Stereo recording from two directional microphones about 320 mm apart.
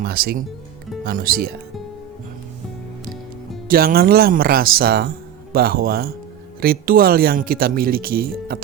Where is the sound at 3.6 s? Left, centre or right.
Right.